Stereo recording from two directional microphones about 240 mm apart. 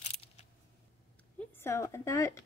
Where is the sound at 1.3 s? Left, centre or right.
Centre.